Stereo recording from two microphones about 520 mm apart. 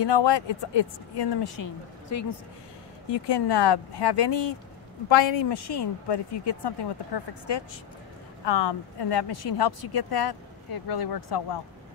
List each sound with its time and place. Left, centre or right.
0.0 s speech: left
2.0 s speech: left
3.1 s speech: left
8.5 s speech: left